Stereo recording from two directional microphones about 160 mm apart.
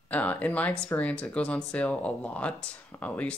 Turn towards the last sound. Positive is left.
turn(degrees=10)  # may be behind; listen again after turning